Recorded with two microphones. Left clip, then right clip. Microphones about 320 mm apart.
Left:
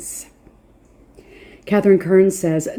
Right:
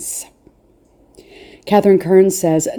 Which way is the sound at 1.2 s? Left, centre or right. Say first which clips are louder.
Right 5 dB; right.